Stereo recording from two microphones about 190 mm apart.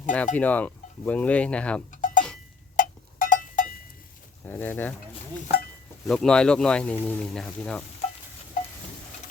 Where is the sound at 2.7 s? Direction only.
45° left (ahead or behind).